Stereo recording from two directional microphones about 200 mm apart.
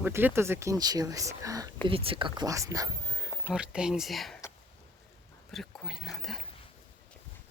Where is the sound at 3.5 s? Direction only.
5° right (ahead or behind).